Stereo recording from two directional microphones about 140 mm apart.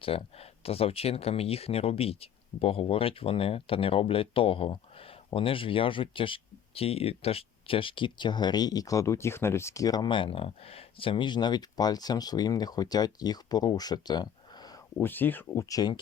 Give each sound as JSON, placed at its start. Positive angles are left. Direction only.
{"t": 0.0, "sound": "speech", "side_deg": 40}
{"t": 14.9, "sound": "speech", "side_deg": 15}
{"t": 15.7, "sound": "speech", "side_deg": 30}